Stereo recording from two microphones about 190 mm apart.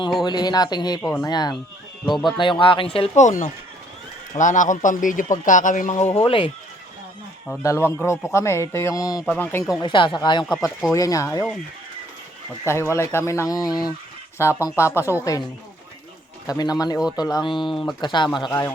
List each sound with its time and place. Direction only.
0.2 s speech: 20° left (ahead or behind)
2.0 s speech: centre (ahead or behind)
2.4 s a man's voice: 25° left (ahead or behind); by 6.1 s 40° left (ahead or behind)
6.1 s speech: 30° left (ahead or behind)
7.6 s speech: 15° left (ahead or behind)
9.8 s speech: 25° left (ahead or behind)
12.6 s speech: 15° left (ahead or behind)
16.5 s speech: 20° left (ahead or behind)
17.7 s speech: centre (ahead or behind)
18.0 s speech: 25° left (ahead or behind)